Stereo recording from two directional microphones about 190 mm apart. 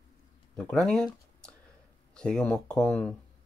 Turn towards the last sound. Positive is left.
turn(degrees=5)  # may be behind; listen again after turning